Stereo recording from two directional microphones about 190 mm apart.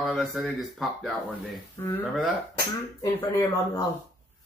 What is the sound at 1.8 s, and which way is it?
Speech, 15° left (ahead or behind).